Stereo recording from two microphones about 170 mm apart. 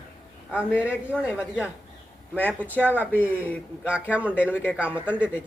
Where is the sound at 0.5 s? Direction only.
5° right (ahead or behind).